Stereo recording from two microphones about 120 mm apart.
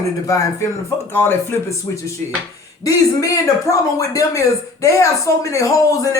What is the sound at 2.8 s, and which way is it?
Speech, 30° left (ahead or behind).